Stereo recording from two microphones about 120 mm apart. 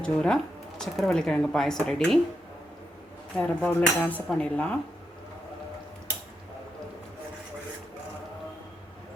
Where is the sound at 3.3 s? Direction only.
10° left (ahead or behind).